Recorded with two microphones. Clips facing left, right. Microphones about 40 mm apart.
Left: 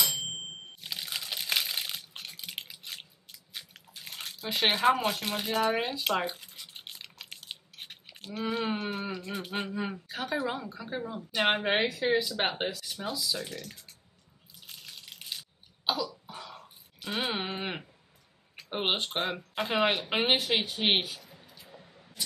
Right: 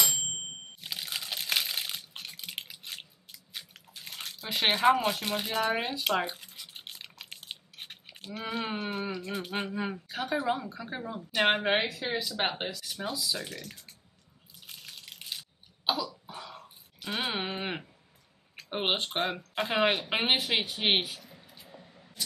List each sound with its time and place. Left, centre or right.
0.3 s water: centre
7.4 s a sound: centre
8.4 s speech: centre
12.8 s speech: centre
14.7 s a sound: centre
16.3 s dog: centre
17.4 s speech: centre
20.5 s speech: right
21.7 s vehicle: right